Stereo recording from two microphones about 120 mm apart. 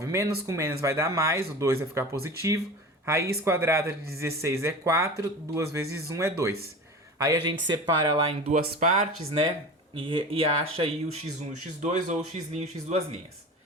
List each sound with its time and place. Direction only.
0.0 s speech: 25° right (ahead or behind)
7.2 s speech: 35° right (ahead or behind)
8.4 s speech: 90° right
9.9 s speech: 45° right (ahead or behind)
11.8 s speech: 80° right; by 13.1 s 60° right (ahead or behind)